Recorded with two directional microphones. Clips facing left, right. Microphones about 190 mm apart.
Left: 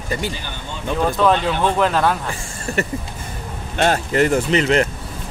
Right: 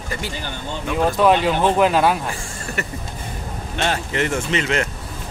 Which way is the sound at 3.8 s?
45° left (ahead or behind).